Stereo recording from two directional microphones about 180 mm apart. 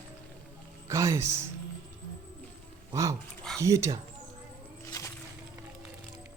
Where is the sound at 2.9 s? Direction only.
15° right (ahead or behind).